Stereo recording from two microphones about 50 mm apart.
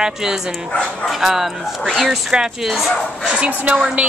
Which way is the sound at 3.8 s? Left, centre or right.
Right.